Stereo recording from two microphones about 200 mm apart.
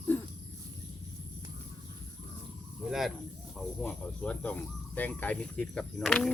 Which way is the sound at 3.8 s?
10° left (ahead or behind).